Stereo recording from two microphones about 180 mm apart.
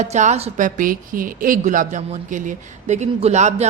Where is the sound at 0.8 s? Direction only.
50° right (ahead or behind).